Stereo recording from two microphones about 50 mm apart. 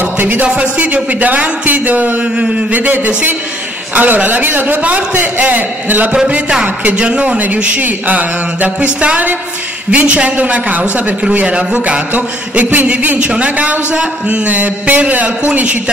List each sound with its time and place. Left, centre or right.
0.0 s a man's voice: right
2.3 s a man's voice: right
6.1 s a man's voice: centre